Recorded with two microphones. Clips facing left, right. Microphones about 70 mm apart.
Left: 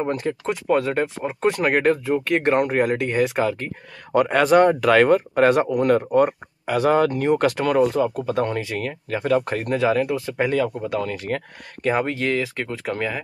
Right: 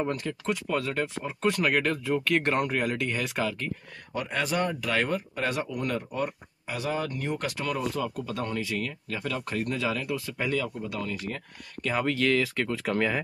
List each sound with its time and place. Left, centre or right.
0.0 s speech: left
4.1 s speech: left
11.8 s speech: left; by 13.2 s centre